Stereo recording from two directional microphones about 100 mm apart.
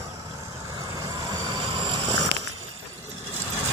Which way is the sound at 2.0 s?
90° right.